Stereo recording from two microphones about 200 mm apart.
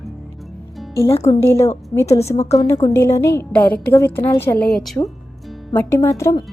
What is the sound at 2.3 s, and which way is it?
Speech, 35° left (ahead or behind).